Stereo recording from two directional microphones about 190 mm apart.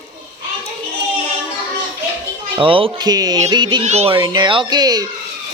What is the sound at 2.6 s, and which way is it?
Speech, 25° right (ahead or behind).